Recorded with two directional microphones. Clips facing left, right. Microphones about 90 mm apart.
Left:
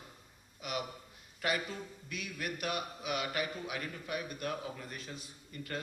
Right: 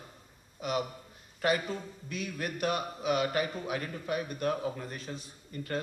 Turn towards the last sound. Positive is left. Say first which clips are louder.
# right 5 dB
turn(degrees=-35)  # may be behind; listen again after turning